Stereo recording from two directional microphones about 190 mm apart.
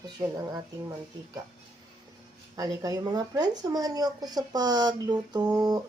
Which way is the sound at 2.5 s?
20° right (ahead or behind).